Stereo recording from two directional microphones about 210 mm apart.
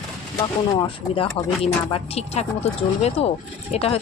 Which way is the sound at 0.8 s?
25° left (ahead or behind).